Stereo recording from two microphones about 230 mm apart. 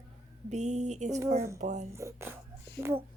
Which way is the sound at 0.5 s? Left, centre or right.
Right.